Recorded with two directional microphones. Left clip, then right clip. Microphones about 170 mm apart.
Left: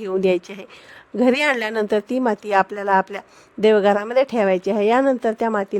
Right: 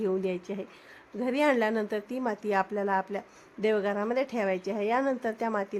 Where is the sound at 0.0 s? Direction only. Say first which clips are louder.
Left 10 dB; 60° left (ahead or behind).